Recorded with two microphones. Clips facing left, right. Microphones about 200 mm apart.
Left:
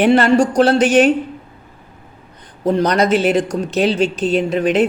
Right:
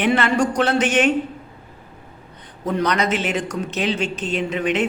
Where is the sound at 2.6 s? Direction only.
30° left (ahead or behind).